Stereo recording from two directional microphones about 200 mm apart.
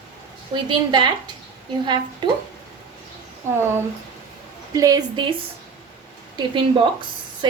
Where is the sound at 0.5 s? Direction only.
20° right (ahead or behind).